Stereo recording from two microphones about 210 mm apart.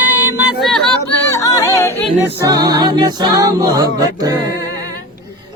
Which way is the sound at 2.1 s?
10° right (ahead or behind).